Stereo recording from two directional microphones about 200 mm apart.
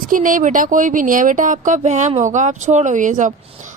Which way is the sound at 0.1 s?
40° right (ahead or behind).